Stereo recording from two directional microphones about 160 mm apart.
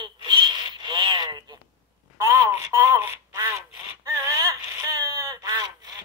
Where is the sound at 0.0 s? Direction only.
30° right (ahead or behind).